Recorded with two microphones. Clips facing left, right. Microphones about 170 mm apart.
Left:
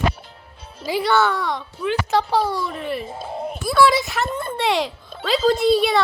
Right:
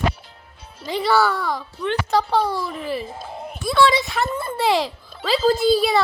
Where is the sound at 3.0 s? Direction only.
25° left (ahead or behind).